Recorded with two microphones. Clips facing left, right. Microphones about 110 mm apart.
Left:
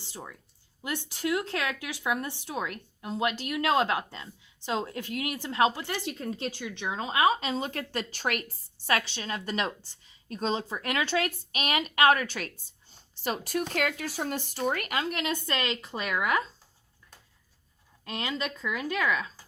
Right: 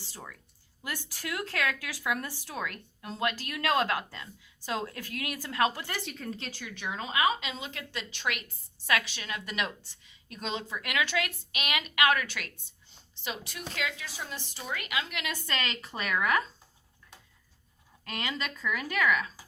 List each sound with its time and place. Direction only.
0.0 s speech: 20° left (ahead or behind); by 15.4 s 35° left (ahead or behind)
15.4 s speech: 25° left (ahead or behind)
18.0 s speech: 20° left (ahead or behind)